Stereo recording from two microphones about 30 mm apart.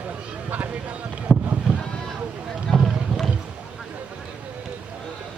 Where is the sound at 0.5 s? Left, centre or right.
Right.